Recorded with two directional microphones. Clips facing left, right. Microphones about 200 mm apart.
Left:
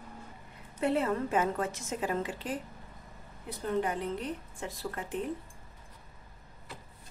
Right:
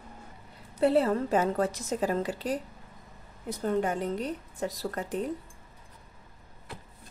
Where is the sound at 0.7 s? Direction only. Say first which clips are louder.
Right 5 dB; 35° right (ahead or behind).